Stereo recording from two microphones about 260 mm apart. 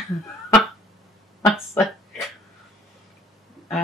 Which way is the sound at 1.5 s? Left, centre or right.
Centre.